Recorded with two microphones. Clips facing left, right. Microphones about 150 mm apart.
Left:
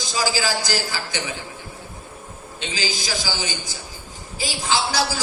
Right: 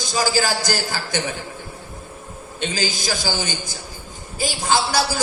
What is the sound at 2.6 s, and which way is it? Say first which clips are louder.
A man's voice: right 4 dB; 50° right (ahead or behind).